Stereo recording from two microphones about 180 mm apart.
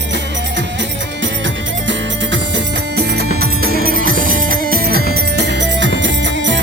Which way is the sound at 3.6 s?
55° right (ahead or behind).